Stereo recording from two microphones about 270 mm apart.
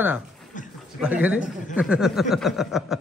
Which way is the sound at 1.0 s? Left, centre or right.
Centre.